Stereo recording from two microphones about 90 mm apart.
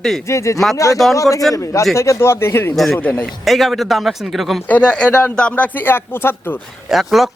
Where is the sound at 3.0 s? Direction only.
15° left (ahead or behind).